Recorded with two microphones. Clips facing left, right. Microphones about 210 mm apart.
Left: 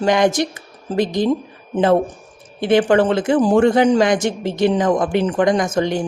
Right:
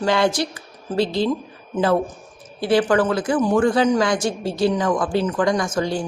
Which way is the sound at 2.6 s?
25° left (ahead or behind).